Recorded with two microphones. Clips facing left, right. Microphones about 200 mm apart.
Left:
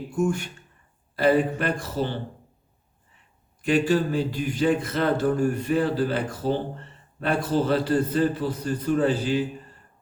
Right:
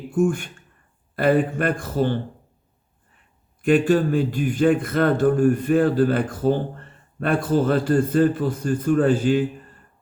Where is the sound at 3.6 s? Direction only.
55° right (ahead or behind).